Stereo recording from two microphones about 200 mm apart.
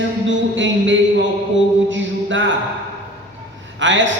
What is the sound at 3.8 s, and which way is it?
Speech, 65° right (ahead or behind).